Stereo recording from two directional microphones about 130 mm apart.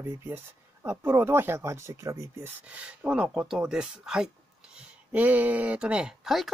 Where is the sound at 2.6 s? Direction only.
10° right (ahead or behind).